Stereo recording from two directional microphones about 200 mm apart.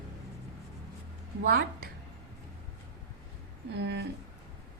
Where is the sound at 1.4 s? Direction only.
50° right (ahead or behind).